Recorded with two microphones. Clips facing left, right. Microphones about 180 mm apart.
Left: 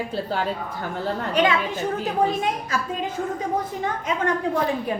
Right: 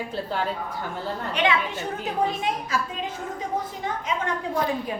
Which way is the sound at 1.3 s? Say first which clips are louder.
Left 3 dB; 40° left (ahead or behind).